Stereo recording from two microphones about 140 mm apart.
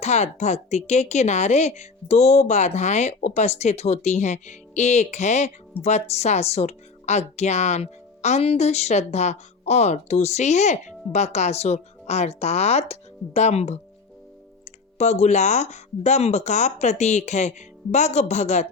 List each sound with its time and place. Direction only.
0.0 s speech: 50° left (ahead or behind)
14.9 s speech: 55° left (ahead or behind)